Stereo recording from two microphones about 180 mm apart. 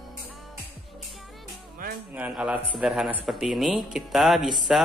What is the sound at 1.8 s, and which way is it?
Music, 50° right (ahead or behind).